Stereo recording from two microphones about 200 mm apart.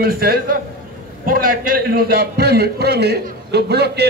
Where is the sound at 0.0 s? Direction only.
50° right (ahead or behind).